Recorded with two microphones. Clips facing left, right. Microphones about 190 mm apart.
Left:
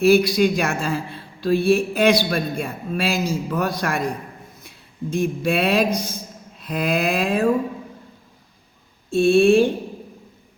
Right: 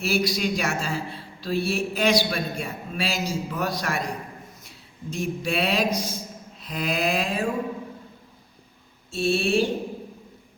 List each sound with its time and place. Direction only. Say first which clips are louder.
0.0 s a man's voice: left 9 dB; 55° left (ahead or behind)
5.1 s a man's voice: left 6 dB; 55° left (ahead or behind)
9.0 s a man's voice: left 10 dB; 55° left (ahead or behind)